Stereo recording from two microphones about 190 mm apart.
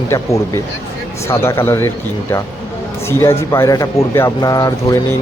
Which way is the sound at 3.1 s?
15° left (ahead or behind).